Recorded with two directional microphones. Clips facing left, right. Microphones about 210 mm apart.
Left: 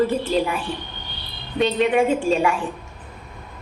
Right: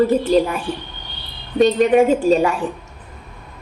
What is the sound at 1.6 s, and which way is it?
Speech, 40° right (ahead or behind).